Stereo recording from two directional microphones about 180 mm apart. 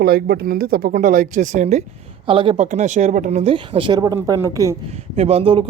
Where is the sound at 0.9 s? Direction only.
45° right (ahead or behind).